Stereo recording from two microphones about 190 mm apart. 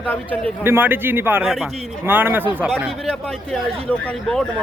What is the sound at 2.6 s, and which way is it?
Speech, centre (ahead or behind).